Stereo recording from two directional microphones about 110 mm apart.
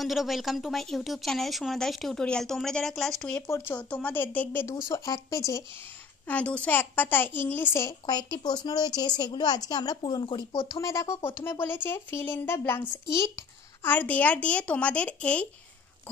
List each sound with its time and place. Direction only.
0.0 s speech: centre (ahead or behind)
3.4 s speech: 25° left (ahead or behind)
3.7 s a child's voice: 15° left (ahead or behind)
4.8 s speech: 30° left (ahead or behind)
6.2 s a child's voice: 15° left (ahead or behind)
8.1 s a woman's voice: 40° left (ahead or behind)
10.8 s speech: 25° left (ahead or behind)
13.8 s a child's voice: 15° left (ahead or behind)